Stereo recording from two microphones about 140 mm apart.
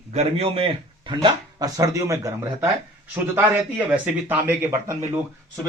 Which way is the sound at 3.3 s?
10° right (ahead or behind).